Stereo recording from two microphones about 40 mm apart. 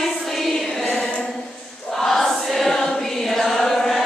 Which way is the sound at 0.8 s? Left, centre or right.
Left.